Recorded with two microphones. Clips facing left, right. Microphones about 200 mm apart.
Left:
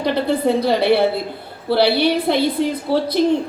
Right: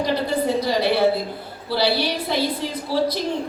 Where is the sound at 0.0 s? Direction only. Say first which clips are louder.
Left 4 dB; 60° left (ahead or behind).